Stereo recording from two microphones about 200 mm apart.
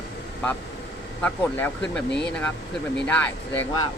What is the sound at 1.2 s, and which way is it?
Speech, 5° left (ahead or behind).